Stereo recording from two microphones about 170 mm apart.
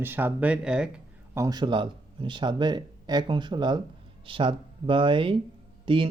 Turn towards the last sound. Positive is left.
turn(degrees=-30)  # may be behind; listen again after turning